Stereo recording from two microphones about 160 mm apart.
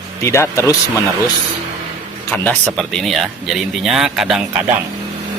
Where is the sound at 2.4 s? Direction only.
5° left (ahead or behind).